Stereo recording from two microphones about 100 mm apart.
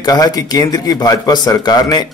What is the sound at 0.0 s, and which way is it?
A man's voice, 40° left (ahead or behind).